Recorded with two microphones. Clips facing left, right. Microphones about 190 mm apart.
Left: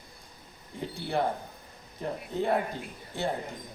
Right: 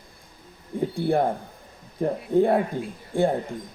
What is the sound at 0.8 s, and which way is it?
Mouse, 50° right (ahead or behind).